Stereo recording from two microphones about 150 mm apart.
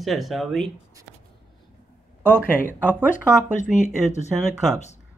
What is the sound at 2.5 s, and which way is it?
Speech, 15° left (ahead or behind).